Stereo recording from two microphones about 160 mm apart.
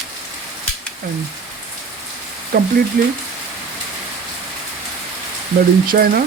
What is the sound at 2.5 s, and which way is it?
Speech, 60° right (ahead or behind).